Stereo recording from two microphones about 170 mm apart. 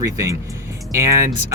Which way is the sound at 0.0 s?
20° right (ahead or behind).